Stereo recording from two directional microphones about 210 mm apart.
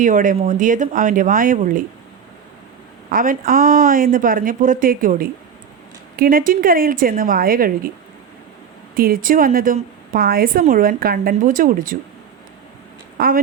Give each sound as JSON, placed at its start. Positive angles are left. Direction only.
{"t": 0.0, "sound": "speech", "side_deg": -40}
{"t": 3.1, "sound": "a woman's voice", "side_deg": -40}
{"t": 9.0, "sound": "a woman's voice", "side_deg": -45}
{"t": 13.1, "sound": "speech", "side_deg": -45}